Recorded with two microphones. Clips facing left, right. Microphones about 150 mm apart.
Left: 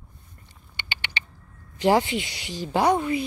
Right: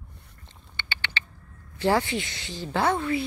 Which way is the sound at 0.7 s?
15° left (ahead or behind).